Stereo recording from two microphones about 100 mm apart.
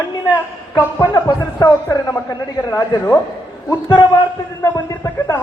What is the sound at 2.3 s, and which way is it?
Speech, 35° left (ahead or behind).